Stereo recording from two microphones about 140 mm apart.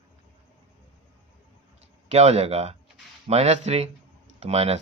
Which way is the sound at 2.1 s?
50° right (ahead or behind).